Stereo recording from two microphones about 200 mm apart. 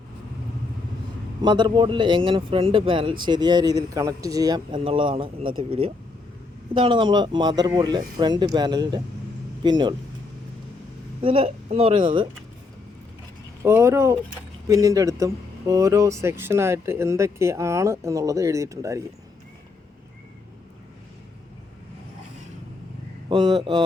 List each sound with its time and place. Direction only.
1.4 s speech: 20° right (ahead or behind)
11.2 s speech: 25° right (ahead or behind)
13.6 s speech: 15° right (ahead or behind)
23.3 s speech: 20° right (ahead or behind)